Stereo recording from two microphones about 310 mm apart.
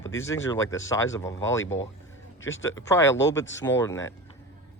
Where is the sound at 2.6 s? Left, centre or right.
Centre.